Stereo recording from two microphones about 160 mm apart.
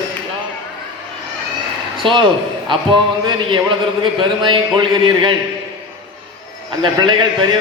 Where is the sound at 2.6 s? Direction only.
30° right (ahead or behind).